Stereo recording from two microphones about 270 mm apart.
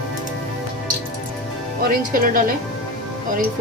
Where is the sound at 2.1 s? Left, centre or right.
Right.